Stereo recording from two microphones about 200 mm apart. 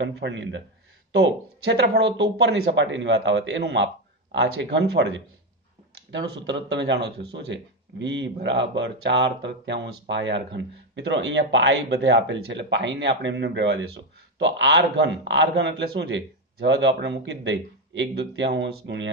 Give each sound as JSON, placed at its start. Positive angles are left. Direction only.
{"t": 0.0, "sound": "speech", "side_deg": -65}